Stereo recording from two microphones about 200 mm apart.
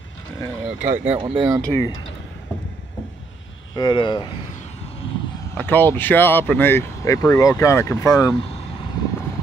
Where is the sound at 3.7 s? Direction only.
25° left (ahead or behind).